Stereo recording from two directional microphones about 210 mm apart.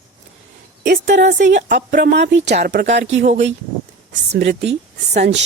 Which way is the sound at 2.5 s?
35° right (ahead or behind).